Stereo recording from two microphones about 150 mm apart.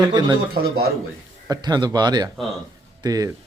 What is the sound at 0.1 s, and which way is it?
Speech, 30° right (ahead or behind).